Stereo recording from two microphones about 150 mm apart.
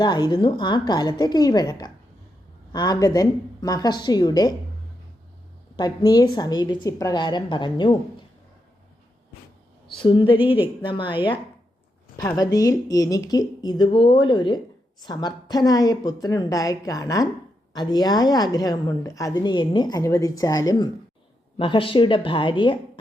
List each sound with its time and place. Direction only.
0.0 s a woman's voice: 30° left (ahead or behind)
5.7 s a woman's voice: 30° left (ahead or behind)
9.8 s a woman's voice: 35° left (ahead or behind)
12.4 s a woman's voice: 25° left (ahead or behind)
21.6 s a woman's voice: 35° left (ahead or behind)